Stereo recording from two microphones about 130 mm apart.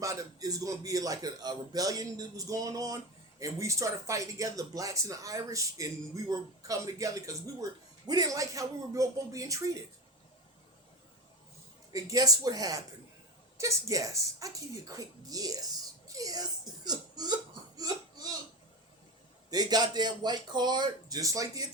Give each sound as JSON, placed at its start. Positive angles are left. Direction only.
{"t": 0.0, "sound": "a man's voice", "side_deg": -25}
{"t": 11.9, "sound": "a man's voice", "side_deg": -25}
{"t": 16.0, "sound": "a sound", "side_deg": -25}
{"t": 17.7, "sound": "hiccup", "side_deg": -30}
{"t": 19.5, "sound": "speech", "side_deg": -30}